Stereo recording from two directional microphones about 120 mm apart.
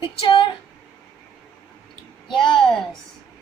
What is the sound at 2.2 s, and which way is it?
Speech, 45° left (ahead or behind).